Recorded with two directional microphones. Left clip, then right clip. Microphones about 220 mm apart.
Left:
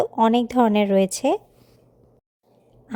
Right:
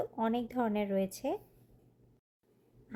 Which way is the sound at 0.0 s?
40° left (ahead or behind).